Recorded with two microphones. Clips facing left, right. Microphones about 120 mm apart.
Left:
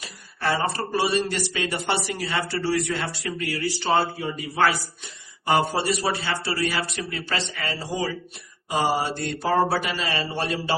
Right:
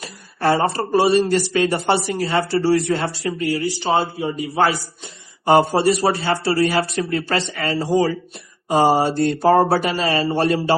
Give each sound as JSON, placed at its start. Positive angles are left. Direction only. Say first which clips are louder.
{"t": 0.0, "sound": "a woman's voice", "louder": "right 7 dB", "side_deg": -40}
{"t": 5.5, "sound": "a woman's voice", "louder": "right 7 dB", "side_deg": -35}